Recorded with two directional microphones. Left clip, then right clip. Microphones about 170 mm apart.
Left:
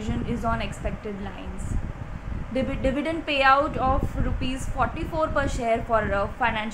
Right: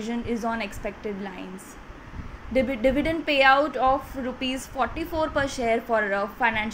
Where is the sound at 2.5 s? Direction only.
10° right (ahead or behind).